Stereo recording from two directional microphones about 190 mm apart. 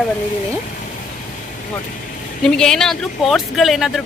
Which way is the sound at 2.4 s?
5° left (ahead or behind).